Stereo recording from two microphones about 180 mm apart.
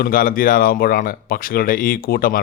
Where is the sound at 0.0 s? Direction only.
55° left (ahead or behind).